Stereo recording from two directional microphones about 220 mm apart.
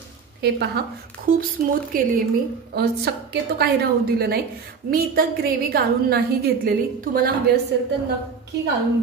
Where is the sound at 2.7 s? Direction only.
50° right (ahead or behind).